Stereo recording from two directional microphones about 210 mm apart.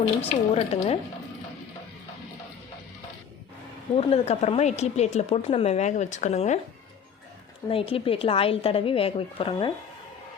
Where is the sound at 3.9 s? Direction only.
30° left (ahead or behind).